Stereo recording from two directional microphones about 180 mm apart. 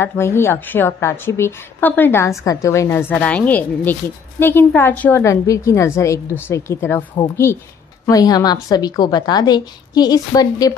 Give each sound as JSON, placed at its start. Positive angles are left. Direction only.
{"t": 0.0, "sound": "a woman's voice", "side_deg": 15}
{"t": 8.1, "sound": "a woman's voice", "side_deg": 20}